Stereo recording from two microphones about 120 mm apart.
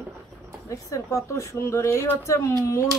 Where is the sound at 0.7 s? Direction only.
25° left (ahead or behind).